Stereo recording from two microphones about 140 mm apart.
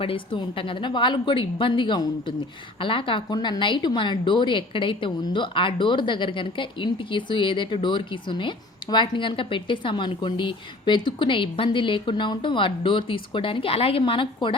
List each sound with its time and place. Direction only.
0.0 s a woman's voice: 40° left (ahead or behind)